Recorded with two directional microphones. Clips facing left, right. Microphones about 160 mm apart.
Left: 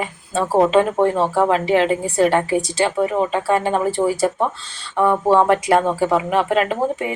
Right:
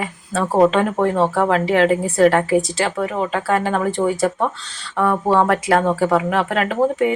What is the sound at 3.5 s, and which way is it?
Speech, 30° left (ahead or behind).